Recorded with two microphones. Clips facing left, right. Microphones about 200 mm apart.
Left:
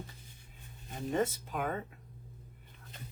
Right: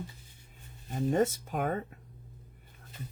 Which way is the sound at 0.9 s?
45° right (ahead or behind).